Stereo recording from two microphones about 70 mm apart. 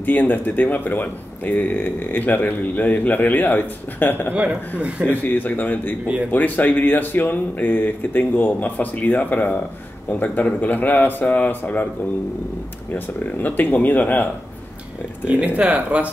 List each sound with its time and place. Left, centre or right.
0.0 s speech: left
4.3 s a man's voice: centre
5.1 s speech: left
12.9 s speech: left
15.2 s speech: centre